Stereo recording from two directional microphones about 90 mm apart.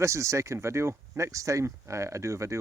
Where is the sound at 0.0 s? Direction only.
35° right (ahead or behind).